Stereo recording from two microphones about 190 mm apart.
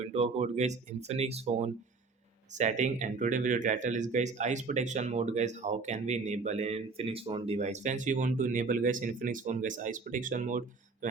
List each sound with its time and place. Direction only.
0.0 s speech: 35° right (ahead or behind)